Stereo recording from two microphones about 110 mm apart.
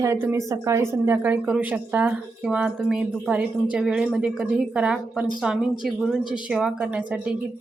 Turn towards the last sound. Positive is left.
turn(degrees=-10)  # may be behind; listen again after turning